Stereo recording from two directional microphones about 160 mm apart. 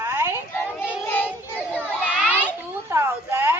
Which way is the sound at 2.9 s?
15° right (ahead or behind).